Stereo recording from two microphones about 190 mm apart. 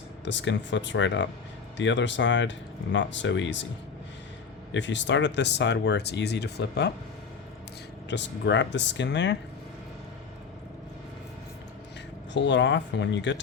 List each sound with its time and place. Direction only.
0.3 s speech: 70° left (ahead or behind)
4.7 s speech: 70° left (ahead or behind)
8.1 s speech: 70° left (ahead or behind)
12.3 s speech: 70° left (ahead or behind)